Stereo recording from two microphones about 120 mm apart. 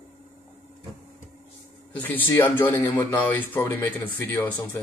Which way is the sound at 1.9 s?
15° left (ahead or behind).